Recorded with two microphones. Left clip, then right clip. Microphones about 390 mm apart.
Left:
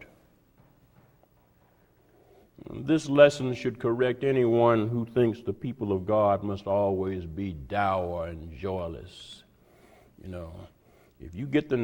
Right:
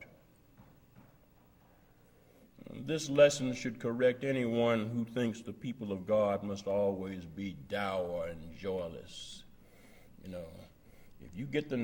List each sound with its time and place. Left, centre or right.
2.6 s speech: left
9.9 s a sound: left
11.2 s speech: left